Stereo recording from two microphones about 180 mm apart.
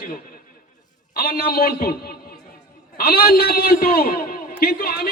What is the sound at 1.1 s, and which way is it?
Speech, 60° left (ahead or behind).